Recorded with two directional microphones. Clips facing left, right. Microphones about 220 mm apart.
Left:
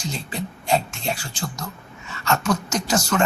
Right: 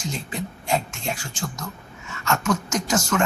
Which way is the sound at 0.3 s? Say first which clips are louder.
Left 3 dB; 35° left (ahead or behind).